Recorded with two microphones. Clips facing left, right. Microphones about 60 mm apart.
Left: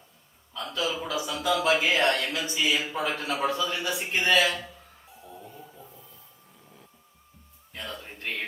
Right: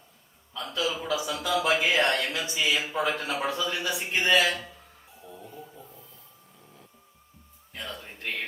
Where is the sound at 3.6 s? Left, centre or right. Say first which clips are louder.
Left 1 dB; centre.